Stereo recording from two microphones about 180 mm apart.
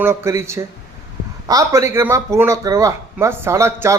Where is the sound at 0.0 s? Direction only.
15° right (ahead or behind).